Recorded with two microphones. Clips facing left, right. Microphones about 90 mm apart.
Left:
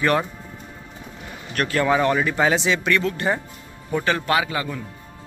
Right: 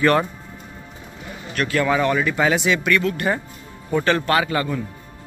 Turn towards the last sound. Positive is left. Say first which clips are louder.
# right 2 dB
turn(degrees=10)  # may be behind; listen again after turning